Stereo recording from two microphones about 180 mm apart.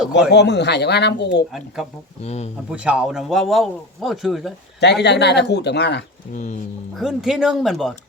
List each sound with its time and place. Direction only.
0.3 s speech: 70° left (ahead or behind)
1.5 s speech: centre (ahead or behind)
2.2 s speech: 40° left (ahead or behind)
2.6 s speech: 5° right (ahead or behind)
4.8 s speech: 70° left (ahead or behind)
6.3 s speech: 45° left (ahead or behind)
6.9 s speech: centre (ahead or behind)